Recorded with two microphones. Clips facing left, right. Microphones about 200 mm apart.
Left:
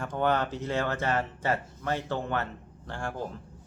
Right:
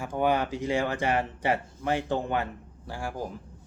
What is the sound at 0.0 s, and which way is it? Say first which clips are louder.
Speech: right 1 dB; 10° right (ahead or behind).